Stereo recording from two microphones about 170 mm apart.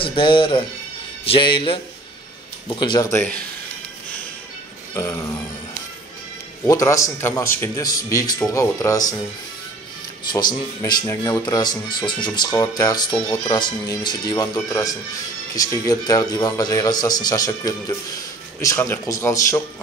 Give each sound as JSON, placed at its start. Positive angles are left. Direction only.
{"t": 0.0, "sound": "speech", "side_deg": 30}
{"t": 1.2, "sound": "music", "side_deg": 30}
{"t": 2.7, "sound": "speech", "side_deg": 25}
{"t": 4.9, "sound": "a sound", "side_deg": 15}
{"t": 6.6, "sound": "speech", "side_deg": 20}
{"t": 10.3, "sound": "speech", "side_deg": 20}